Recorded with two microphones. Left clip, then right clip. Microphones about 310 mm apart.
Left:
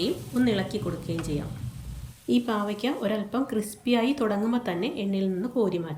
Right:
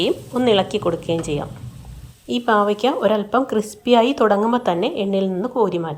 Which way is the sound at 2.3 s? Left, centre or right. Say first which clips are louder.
Right 10 dB; centre.